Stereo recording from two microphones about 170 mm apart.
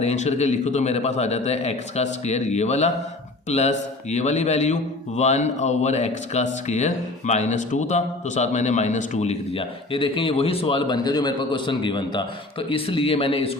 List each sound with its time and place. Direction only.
0.0 s a man's voice: 40° left (ahead or behind)